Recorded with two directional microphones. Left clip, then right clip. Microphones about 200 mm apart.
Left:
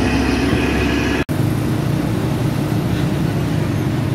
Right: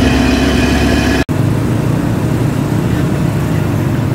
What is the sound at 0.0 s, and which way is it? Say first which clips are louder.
Vehicle: right 5 dB; 45° right (ahead or behind).